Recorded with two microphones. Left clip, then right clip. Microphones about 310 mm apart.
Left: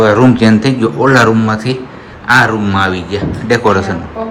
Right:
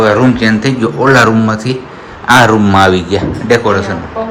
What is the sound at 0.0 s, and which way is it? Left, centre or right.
A man's voice, centre.